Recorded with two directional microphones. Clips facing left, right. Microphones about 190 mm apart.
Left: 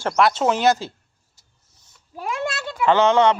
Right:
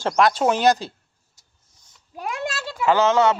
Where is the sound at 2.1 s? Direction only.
15° right (ahead or behind).